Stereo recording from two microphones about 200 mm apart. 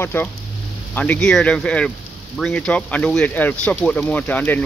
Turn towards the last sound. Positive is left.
turn(degrees=10)  # may be behind; listen again after turning